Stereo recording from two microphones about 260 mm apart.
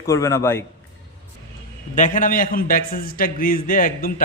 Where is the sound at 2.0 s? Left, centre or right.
Left.